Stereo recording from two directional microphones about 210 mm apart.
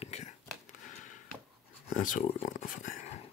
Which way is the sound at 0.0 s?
30° left (ahead or behind).